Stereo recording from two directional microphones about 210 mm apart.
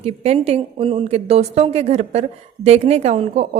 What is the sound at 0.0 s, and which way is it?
A woman's voice, 30° right (ahead or behind).